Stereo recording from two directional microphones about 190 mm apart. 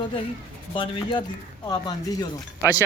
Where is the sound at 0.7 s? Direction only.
25° left (ahead or behind).